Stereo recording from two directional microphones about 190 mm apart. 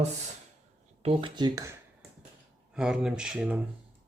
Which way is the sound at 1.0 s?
25° right (ahead or behind).